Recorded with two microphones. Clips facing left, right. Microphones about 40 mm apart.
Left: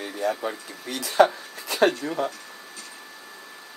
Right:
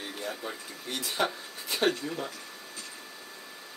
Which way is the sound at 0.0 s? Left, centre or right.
Left.